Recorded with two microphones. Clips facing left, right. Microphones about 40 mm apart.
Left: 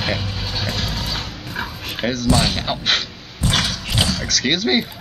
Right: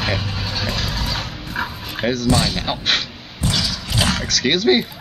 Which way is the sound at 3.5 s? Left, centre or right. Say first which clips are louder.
Left 3 dB; left.